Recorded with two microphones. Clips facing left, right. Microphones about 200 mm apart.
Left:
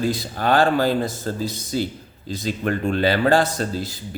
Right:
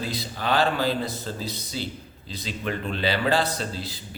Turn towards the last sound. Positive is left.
turn(degrees=45)  # may be behind; listen again after turning